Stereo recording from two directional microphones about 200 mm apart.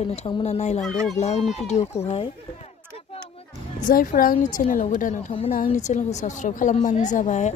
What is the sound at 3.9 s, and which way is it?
A woman's voice, 45° left (ahead or behind).